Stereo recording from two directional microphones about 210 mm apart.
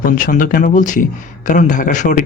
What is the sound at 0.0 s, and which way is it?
A man's voice, 40° left (ahead or behind).